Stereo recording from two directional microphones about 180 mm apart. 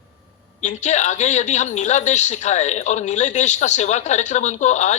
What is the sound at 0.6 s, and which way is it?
A woman's voice, 40° left (ahead or behind).